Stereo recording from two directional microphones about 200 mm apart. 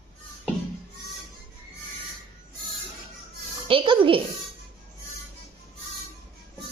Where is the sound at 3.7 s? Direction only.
25° right (ahead or behind).